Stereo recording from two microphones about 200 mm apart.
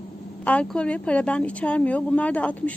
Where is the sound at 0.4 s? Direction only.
5° left (ahead or behind).